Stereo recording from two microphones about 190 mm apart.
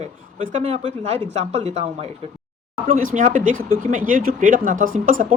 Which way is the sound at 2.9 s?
45° right (ahead or behind).